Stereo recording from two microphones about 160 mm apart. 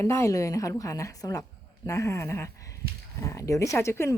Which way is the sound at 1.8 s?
20° left (ahead or behind).